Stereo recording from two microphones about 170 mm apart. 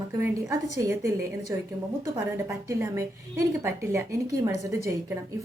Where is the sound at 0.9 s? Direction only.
15° right (ahead or behind).